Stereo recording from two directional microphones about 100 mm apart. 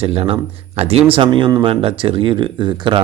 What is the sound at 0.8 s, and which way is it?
Speech, 80° right.